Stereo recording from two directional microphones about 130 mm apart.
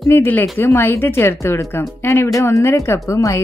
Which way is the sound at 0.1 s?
15° left (ahead or behind).